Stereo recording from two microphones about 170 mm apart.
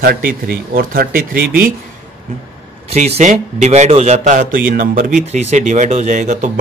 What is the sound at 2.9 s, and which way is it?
A man's voice, 40° right (ahead or behind).